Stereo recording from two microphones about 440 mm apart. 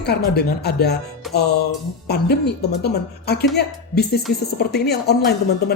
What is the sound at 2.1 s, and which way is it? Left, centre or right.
Speech, left.